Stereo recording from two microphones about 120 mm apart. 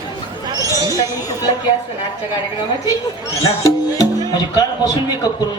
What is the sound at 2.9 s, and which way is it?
Speech, 25° left (ahead or behind).